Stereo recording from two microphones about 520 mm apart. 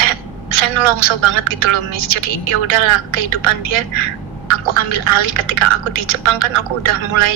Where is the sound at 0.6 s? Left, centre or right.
Right.